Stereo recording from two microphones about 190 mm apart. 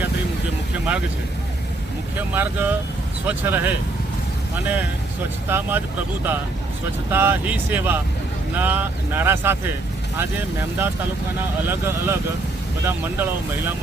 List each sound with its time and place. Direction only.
2.1 s speech: 10° right (ahead or behind)
5.5 s speech: 10° right (ahead or behind)
7.1 s speech: 10° right (ahead or behind)